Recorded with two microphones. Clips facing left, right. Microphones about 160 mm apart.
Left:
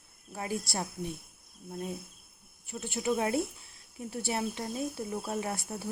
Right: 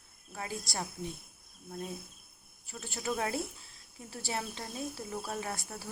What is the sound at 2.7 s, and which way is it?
Speech, 20° left (ahead or behind).